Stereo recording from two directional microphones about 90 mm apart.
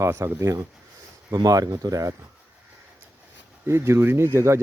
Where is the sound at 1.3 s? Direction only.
45° right (ahead or behind).